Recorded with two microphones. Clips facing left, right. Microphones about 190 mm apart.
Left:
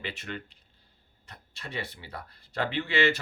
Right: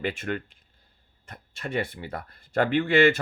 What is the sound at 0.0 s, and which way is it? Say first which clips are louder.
Speech: right 8 dB; 50° right (ahead or behind).